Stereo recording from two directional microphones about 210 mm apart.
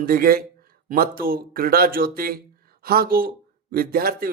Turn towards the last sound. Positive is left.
turn(degrees=-45)  # may be behind; listen again after turning